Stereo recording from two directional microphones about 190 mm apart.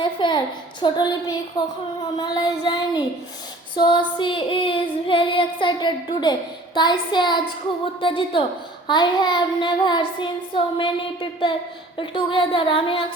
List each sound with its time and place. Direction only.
0.0 s a woman's voice: 25° left (ahead or behind)